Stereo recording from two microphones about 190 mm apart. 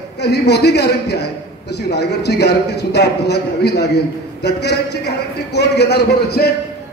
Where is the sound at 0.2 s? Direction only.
60° left (ahead or behind).